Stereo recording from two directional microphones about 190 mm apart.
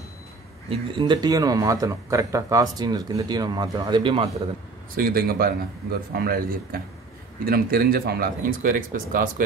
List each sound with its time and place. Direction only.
0.7 s speech: 25° right (ahead or behind)
4.9 s speech: 50° right (ahead or behind)